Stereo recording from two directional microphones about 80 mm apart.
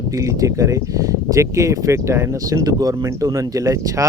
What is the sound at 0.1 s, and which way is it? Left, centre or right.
Speech, right.